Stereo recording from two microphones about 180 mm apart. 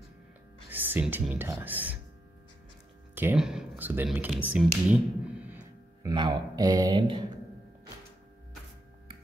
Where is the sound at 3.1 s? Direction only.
5° right (ahead or behind).